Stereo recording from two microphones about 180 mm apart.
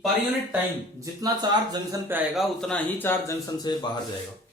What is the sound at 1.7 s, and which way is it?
Speech, 20° right (ahead or behind).